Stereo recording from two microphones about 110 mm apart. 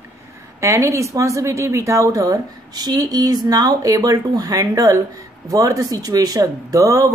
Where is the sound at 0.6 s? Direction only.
30° right (ahead or behind).